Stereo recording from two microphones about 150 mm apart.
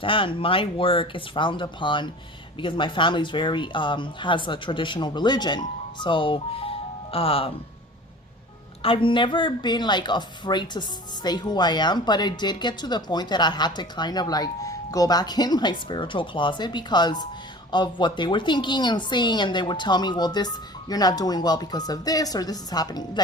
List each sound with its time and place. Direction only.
0.0 s speech: 35° left (ahead or behind)
8.8 s speech: 35° left (ahead or behind)